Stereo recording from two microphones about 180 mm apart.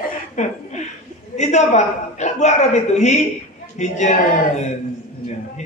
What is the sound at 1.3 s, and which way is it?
Mantra, 40° left (ahead or behind).